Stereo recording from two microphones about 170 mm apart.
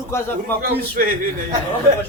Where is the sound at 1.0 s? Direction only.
55° right (ahead or behind).